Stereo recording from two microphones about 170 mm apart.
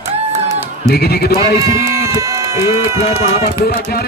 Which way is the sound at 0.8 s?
65° left (ahead or behind).